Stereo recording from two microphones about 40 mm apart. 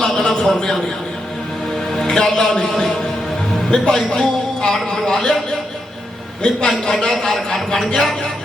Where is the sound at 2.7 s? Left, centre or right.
Centre.